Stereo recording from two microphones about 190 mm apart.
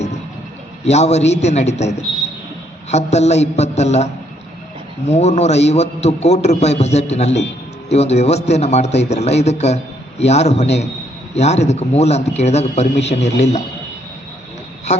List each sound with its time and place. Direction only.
0.9 s a man's voice: 35° left (ahead or behind)